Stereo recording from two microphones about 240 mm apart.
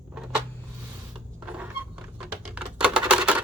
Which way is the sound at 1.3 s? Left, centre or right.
Centre.